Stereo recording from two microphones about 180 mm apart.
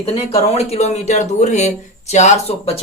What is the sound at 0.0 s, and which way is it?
Speech, 35° left (ahead or behind).